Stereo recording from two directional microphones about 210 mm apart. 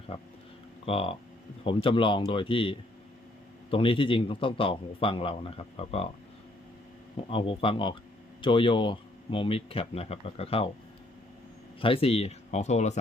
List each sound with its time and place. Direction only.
0.9 s a man's voice: 25° left (ahead or behind)
7.3 s a man's voice: 25° left (ahead or behind)
11.8 s speech: 25° left (ahead or behind)